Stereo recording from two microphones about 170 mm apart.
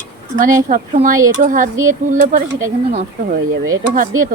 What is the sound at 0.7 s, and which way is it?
Speech, 50° right (ahead or behind).